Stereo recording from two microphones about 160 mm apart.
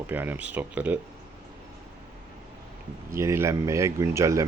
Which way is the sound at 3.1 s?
15° right (ahead or behind).